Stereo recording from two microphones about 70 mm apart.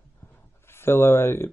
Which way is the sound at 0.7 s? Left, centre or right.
Left.